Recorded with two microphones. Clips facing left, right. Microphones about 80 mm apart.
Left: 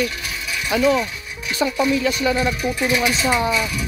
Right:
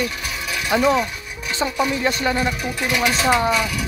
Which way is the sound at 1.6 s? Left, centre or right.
Centre.